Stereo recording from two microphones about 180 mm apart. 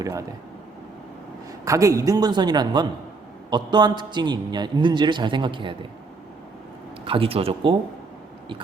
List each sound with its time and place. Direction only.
0.0 s a man's voice: 20° right (ahead or behind)
1.6 s a man's voice: 15° right (ahead or behind)
7.0 s a man's voice: 30° right (ahead or behind)